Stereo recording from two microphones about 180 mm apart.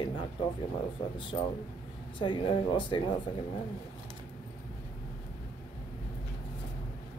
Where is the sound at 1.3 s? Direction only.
25° left (ahead or behind).